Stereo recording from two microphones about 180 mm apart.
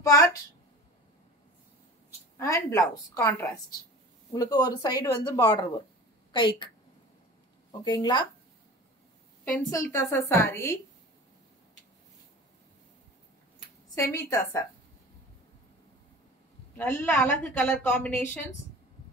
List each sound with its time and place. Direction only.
0.0 s a woman's voice: 20° left (ahead or behind)
2.3 s a woman's voice: 20° left (ahead or behind)
7.8 s a woman's voice: 25° left (ahead or behind)
9.7 s a woman's voice: 15° left (ahead or behind)
13.9 s a woman's voice: 15° left (ahead or behind)
16.7 s a woman's voice: 15° left (ahead or behind)